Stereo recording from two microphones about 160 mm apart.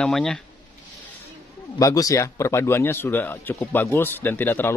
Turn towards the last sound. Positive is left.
turn(degrees=15)  # may be behind; listen again after turning